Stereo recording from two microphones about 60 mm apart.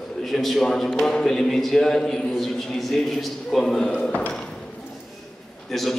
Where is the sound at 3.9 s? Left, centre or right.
Left.